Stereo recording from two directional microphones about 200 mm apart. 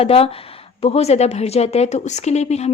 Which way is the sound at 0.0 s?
30° left (ahead or behind).